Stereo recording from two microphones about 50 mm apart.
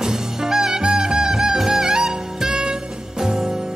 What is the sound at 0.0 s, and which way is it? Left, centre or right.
Music, centre.